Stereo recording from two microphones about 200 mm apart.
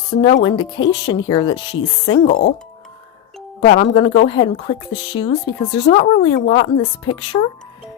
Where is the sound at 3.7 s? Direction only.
30° left (ahead or behind).